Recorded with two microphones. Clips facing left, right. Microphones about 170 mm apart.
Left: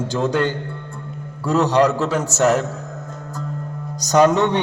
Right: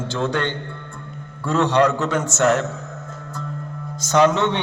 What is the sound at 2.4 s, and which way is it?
Speech, 5° left (ahead or behind).